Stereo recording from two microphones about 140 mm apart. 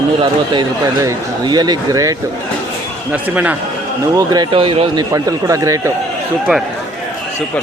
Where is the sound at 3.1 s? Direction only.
10° right (ahead or behind).